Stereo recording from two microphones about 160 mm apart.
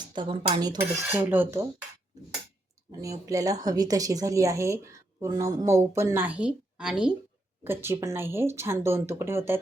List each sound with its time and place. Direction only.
0.1 s a woman's voice: 30° right (ahead or behind)
1.1 s speech: 15° right (ahead or behind)
3.0 s a woman's voice: 20° right (ahead or behind); by 7.1 s 5° right (ahead or behind)
7.6 s speech: 15° right (ahead or behind)